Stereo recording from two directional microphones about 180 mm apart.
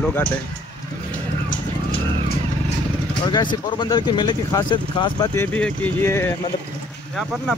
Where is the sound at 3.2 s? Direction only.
25° left (ahead or behind).